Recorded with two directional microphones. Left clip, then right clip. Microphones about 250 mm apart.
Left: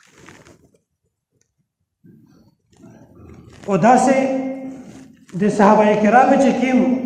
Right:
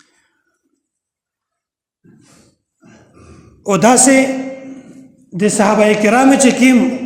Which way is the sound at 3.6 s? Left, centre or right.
Right.